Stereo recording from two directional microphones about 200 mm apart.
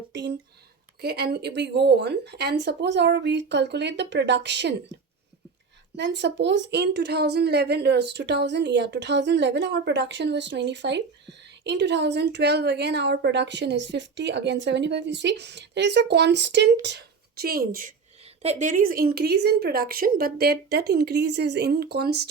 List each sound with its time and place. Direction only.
0.1 s a sound: 60° right (ahead or behind)
1.0 s a woman's voice: 55° right (ahead or behind)
6.0 s a woman's voice: 60° right (ahead or behind)